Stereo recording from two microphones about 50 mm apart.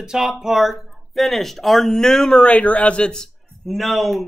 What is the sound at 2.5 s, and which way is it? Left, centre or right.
Speech, left.